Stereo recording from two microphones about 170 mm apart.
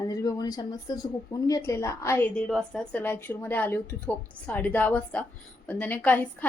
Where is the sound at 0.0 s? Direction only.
20° left (ahead or behind).